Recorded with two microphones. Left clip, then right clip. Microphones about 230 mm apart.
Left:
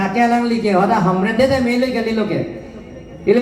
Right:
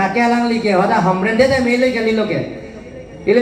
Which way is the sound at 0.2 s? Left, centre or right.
Left.